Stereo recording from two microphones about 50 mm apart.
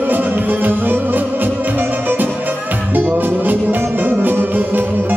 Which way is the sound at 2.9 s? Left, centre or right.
Right.